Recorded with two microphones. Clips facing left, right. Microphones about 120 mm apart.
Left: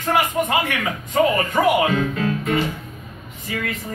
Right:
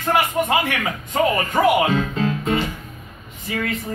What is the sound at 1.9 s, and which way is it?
Music, 25° right (ahead or behind).